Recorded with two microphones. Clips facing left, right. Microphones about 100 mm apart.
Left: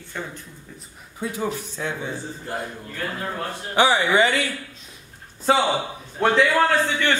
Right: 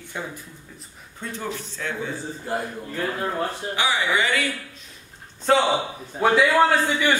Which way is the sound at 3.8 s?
35° left (ahead or behind).